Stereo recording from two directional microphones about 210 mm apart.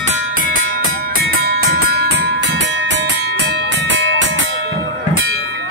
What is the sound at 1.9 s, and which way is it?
Music, 50° right (ahead or behind).